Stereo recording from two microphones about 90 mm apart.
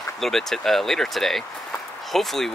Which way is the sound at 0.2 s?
5° left (ahead or behind).